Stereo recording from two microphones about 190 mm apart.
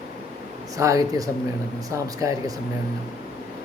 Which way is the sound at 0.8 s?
15° right (ahead or behind).